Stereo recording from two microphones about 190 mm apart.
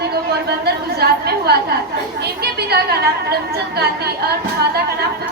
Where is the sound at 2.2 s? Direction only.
60° right (ahead or behind).